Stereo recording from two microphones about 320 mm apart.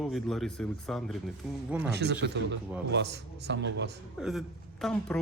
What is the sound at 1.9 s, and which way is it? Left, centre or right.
A man's voice, right.